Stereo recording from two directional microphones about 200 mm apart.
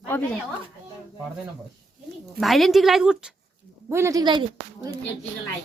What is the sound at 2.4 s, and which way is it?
A woman's voice, centre (ahead or behind).